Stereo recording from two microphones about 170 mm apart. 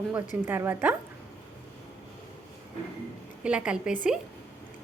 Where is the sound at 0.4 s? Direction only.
10° right (ahead or behind).